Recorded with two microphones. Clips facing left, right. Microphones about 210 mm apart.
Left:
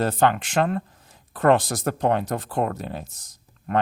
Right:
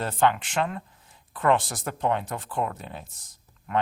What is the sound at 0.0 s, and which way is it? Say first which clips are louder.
Speech: left 3 dB; 40° left (ahead or behind).